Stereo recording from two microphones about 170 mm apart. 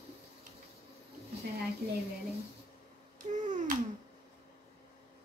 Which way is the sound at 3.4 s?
50° right (ahead or behind).